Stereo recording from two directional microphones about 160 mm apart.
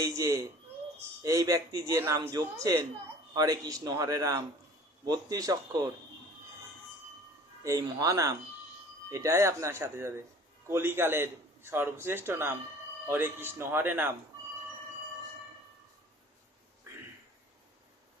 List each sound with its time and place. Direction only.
0.0 s a man's voice: 20° right (ahead or behind)
7.6 s a man's voice: 20° right (ahead or behind)